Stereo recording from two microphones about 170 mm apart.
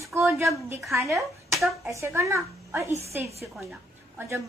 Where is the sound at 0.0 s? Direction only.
15° right (ahead or behind).